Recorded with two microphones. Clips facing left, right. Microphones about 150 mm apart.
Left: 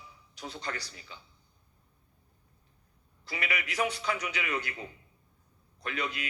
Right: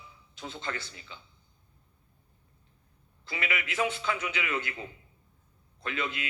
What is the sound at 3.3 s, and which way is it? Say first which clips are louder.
Speech: right 1 dB; 25° right (ahead or behind).